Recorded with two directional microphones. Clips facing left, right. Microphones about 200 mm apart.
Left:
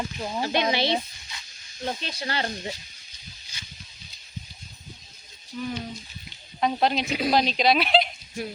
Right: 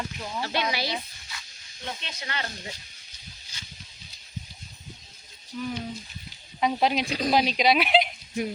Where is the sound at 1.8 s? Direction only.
35° left (ahead or behind).